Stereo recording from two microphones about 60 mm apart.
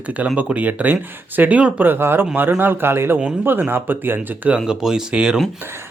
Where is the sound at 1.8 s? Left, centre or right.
Right.